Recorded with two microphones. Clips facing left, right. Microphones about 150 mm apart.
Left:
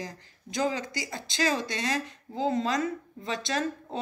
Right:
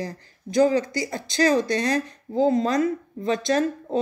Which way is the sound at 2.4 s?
40° right (ahead or behind).